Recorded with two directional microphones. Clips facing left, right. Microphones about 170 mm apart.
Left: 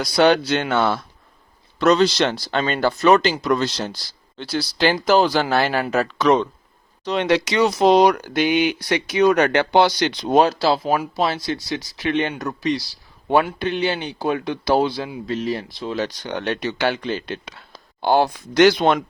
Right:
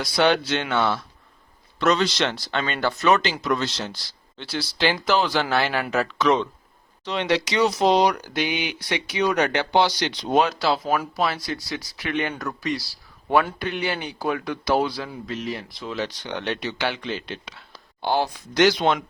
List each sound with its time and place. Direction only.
0.0 s speech: 40° left (ahead or behind)
10.3 s speech: 35° left (ahead or behind); by 18.9 s 55° left (ahead or behind)